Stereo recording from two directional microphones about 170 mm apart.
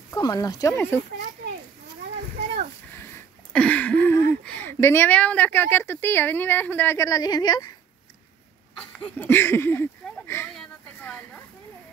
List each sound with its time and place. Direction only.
0.1 s speech: 20° left (ahead or behind)
3.5 s speech: 5° left (ahead or behind); by 7.7 s 25° left (ahead or behind)
8.9 s speech: 10° left (ahead or behind)
10.5 s a sound: 5° left (ahead or behind)